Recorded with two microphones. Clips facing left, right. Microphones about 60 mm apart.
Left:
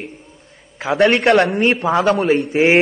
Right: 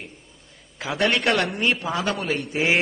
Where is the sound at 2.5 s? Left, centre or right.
Left.